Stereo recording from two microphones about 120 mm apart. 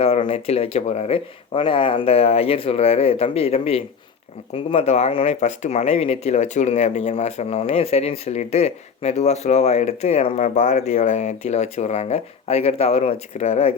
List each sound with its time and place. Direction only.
0.0 s speech: 60° left (ahead or behind)